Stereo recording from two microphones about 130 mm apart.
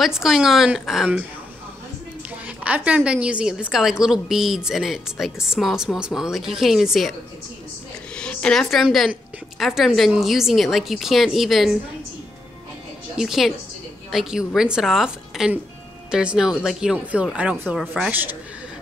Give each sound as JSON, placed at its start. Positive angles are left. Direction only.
{"t": 0.0, "sound": "a woman's voice", "side_deg": 0}
{"t": 2.4, "sound": "a woman's voice", "side_deg": -10}
{"t": 8.2, "sound": "a woman's voice", "side_deg": 5}
{"t": 13.2, "sound": "a woman's voice", "side_deg": -5}